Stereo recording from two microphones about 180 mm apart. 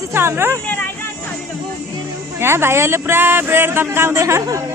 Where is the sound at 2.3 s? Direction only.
15° right (ahead or behind).